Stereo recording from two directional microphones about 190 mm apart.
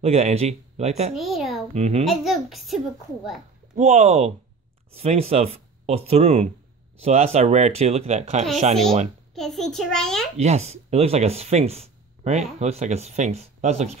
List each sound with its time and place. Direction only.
0.0 s speech: 35° right (ahead or behind)
1.1 s a sound: centre (ahead or behind)
1.7 s speech: 35° right (ahead or behind)
2.0 s a child's voice: centre (ahead or behind)
3.7 s speech: 35° right (ahead or behind)
9.3 s a child's voice: centre (ahead or behind)
10.4 s speech: 35° right (ahead or behind)